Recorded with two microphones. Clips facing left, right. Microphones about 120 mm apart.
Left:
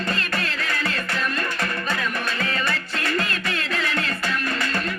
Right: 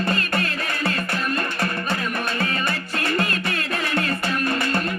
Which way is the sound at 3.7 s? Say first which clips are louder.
Right 2 dB; 40° right (ahead or behind).